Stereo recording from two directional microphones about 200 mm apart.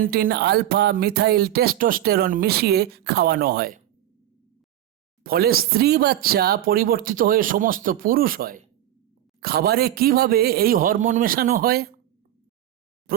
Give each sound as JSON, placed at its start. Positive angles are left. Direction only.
{"t": 0.0, "sound": "speech", "side_deg": -50}
{"t": 5.2, "sound": "speech", "side_deg": -50}
{"t": 13.1, "sound": "a sound", "side_deg": -45}